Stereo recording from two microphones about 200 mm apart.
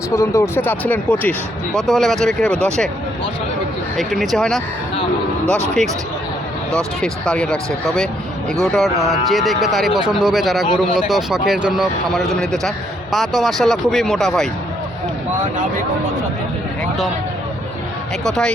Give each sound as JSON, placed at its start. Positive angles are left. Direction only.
{"t": 0.1, "sound": "speech", "side_deg": 15}
{"t": 3.9, "sound": "speech", "side_deg": 0}
{"t": 6.7, "sound": "speech", "side_deg": 5}
{"t": 8.6, "sound": "speech", "side_deg": 0}
{"t": 18.3, "sound": "speech", "side_deg": 5}